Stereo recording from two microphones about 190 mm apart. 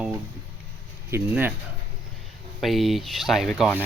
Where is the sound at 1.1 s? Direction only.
10° right (ahead or behind).